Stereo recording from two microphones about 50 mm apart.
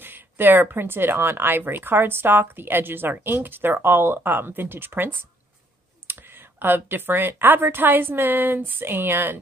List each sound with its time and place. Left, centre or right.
0.0 s speech: right